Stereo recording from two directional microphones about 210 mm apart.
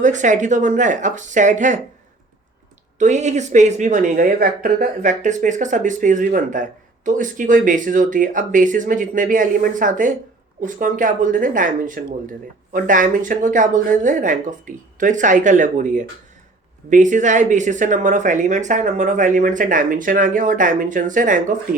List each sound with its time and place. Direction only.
0.0 s speech: 35° right (ahead or behind)
3.0 s speech: 35° right (ahead or behind)